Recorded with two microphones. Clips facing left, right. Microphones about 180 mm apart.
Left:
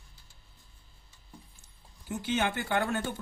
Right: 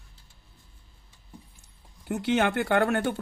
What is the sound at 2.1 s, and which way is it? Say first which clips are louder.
Speech: right 6 dB; 70° right (ahead or behind).